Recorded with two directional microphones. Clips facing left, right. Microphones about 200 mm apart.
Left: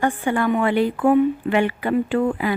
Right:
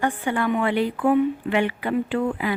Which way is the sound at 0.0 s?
45° left (ahead or behind).